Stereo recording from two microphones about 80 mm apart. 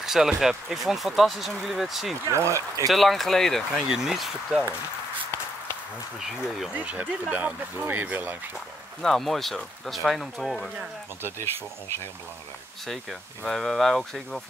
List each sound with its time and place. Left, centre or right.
0.0 s speech: centre
2.2 s speech: right
2.9 s speech: centre
6.7 s speech: centre
9.0 s speech: centre
13.5 s speech: centre